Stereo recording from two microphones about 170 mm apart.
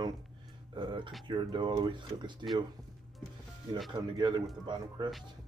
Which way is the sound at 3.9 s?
25° right (ahead or behind).